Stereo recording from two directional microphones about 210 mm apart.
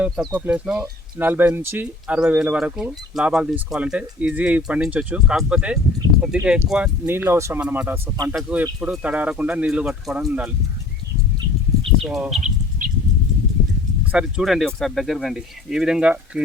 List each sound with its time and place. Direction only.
0.3 s speech: 5° right (ahead or behind)
12.0 s speech: centre (ahead or behind)
12.8 s a sound: 40° right (ahead or behind)
14.1 s speech: 5° right (ahead or behind)